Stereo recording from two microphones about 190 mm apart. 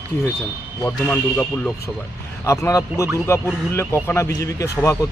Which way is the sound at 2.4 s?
15° left (ahead or behind).